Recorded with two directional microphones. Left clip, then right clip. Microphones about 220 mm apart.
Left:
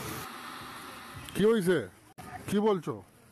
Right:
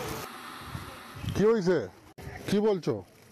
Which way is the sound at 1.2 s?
5° left (ahead or behind).